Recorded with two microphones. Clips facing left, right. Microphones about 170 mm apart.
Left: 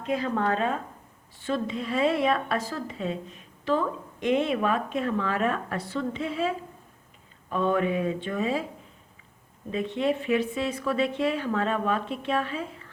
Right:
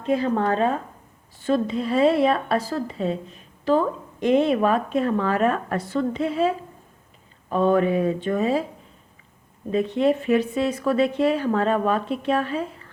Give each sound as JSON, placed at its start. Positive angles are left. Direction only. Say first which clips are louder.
{"t": 0.0, "sound": "a woman's voice", "louder": "right 5 dB", "side_deg": -30}
{"t": 7.5, "sound": "a woman's voice", "louder": "right 6 dB", "side_deg": -40}
{"t": 9.7, "sound": "a woman's voice", "louder": "right 6 dB", "side_deg": -40}